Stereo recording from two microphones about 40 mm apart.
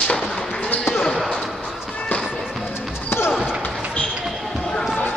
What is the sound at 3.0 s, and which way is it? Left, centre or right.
Basketball bounce, left.